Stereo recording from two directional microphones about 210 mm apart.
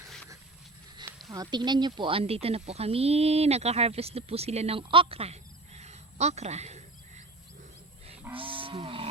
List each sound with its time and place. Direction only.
1.3 s speech: 20° right (ahead or behind)
8.4 s livestock: 25° right (ahead or behind)